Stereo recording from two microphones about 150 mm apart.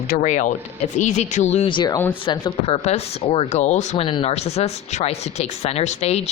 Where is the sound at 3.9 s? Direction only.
35° left (ahead or behind).